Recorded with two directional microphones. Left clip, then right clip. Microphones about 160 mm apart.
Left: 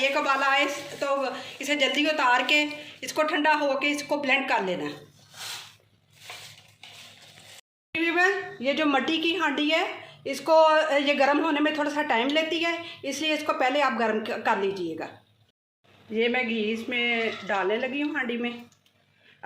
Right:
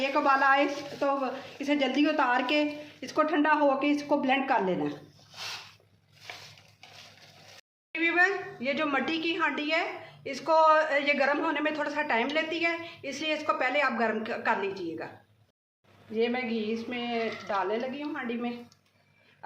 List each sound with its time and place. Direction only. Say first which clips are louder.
0.0 s a woman's voice: left 1 dB; 65° right (ahead or behind)
7.9 s a woman's voice: left 2 dB; 25° left (ahead or behind)
16.1 s speech: left 4 dB; 40° left (ahead or behind)